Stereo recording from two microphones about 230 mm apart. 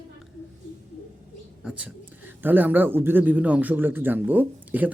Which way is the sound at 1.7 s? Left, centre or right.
Centre.